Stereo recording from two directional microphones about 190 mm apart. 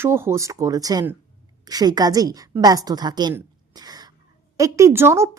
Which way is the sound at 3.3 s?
20° right (ahead or behind).